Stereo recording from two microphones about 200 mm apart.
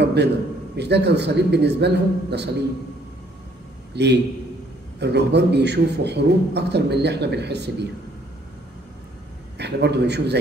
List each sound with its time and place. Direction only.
0.0 s a sound: 55° right (ahead or behind)
0.7 s a man's voice: 55° right (ahead or behind)
3.9 s a man's voice: 55° right (ahead or behind)
9.6 s a man's voice: 55° right (ahead or behind)